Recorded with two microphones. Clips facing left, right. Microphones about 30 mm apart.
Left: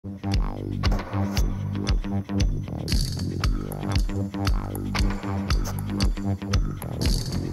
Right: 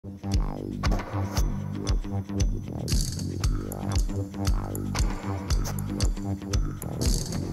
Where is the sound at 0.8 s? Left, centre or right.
Left.